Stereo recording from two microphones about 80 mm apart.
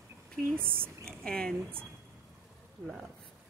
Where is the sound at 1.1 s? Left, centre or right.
Centre.